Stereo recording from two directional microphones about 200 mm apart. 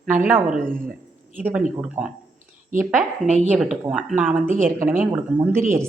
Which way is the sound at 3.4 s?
5° right (ahead or behind).